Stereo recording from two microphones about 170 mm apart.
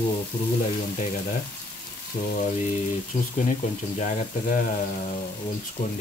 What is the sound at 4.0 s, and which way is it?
Speech, 45° left (ahead or behind).